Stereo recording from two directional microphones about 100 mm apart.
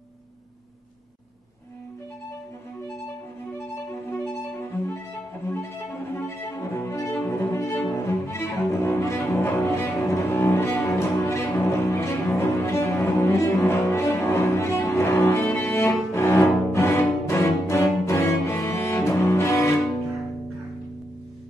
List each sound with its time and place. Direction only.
4.4 s music: 25° left (ahead or behind)
6.1 s cello: 25° left (ahead or behind)
11.0 s music: 30° left (ahead or behind)
11.4 s cello: 25° left (ahead or behind)
17.3 s music: 30° left (ahead or behind)
18.0 s cello: 30° left (ahead or behind)